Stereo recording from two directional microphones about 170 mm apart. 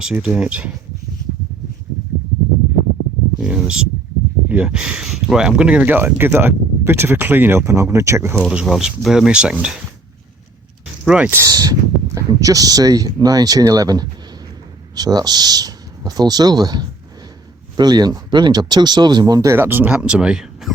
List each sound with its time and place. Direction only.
0.0 s speech: 5° right (ahead or behind)
3.4 s a sound: 5° right (ahead or behind)
4.4 s speech: 5° right (ahead or behind)
8.4 s speech: 5° right (ahead or behind)
11.0 s speech: 5° right (ahead or behind)